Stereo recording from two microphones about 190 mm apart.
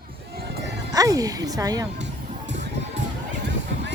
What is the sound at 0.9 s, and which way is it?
Speech, 20° right (ahead or behind).